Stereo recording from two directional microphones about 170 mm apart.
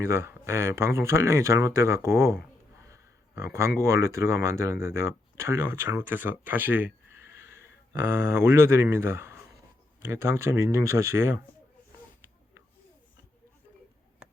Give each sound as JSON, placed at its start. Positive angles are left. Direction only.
{"t": 0.0, "sound": "speech", "side_deg": -15}
{"t": 2.7, "sound": "a sound", "side_deg": -15}
{"t": 3.8, "sound": "speech", "side_deg": -15}